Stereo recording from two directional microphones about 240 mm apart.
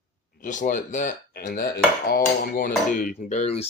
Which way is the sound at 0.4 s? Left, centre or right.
Left.